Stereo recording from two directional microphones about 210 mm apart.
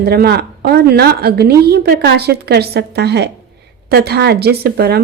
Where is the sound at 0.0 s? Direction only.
50° right (ahead or behind).